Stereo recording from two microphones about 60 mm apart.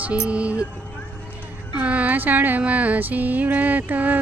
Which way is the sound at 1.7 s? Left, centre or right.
Right.